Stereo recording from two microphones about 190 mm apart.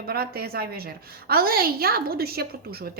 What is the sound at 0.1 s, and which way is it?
A woman's voice, 55° right (ahead or behind).